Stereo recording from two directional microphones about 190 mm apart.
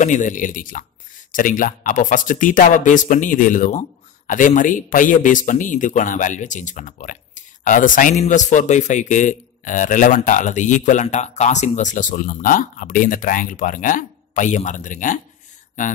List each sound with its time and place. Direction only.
0.0 s speech: 40° left (ahead or behind)